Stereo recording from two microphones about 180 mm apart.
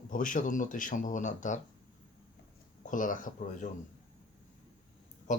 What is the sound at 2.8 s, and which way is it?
Speech, 45° left (ahead or behind).